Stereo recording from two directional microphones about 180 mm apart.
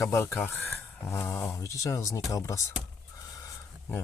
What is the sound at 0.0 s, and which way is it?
Speech, 15° left (ahead or behind).